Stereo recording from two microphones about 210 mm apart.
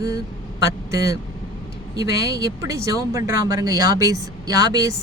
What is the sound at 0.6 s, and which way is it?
Speech, 15° right (ahead or behind).